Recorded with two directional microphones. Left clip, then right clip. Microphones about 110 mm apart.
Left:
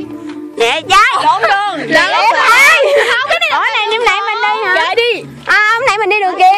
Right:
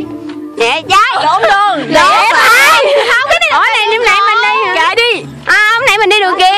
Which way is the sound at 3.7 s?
20° right (ahead or behind).